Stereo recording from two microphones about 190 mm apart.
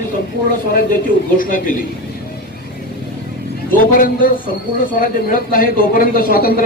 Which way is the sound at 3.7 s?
45° left (ahead or behind).